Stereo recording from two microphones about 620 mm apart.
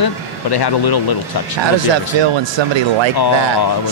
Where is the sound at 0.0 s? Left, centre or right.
Left.